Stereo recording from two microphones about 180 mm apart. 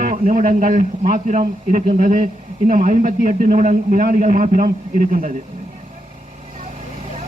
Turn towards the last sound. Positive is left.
turn(degrees=-45)  # may be behind; listen again after turning